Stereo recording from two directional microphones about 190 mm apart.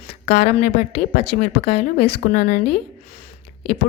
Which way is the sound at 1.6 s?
60° left (ahead or behind).